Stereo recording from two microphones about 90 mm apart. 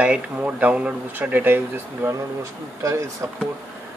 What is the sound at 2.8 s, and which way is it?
Speech, 35° right (ahead or behind).